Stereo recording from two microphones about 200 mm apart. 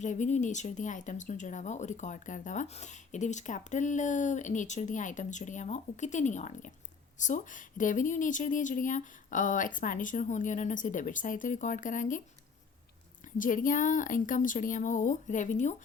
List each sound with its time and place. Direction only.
0.0 s speech: 40° left (ahead or behind)
13.4 s speech: 40° left (ahead or behind)